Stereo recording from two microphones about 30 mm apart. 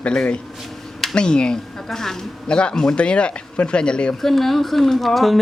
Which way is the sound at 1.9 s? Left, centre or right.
Centre.